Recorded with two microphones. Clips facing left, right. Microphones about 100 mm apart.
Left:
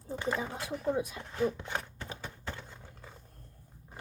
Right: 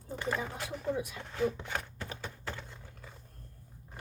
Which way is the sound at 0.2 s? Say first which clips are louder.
Left 1 dB; 20° left (ahead or behind).